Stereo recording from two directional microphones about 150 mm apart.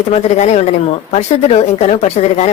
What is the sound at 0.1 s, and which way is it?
A man's voice, 45° left (ahead or behind).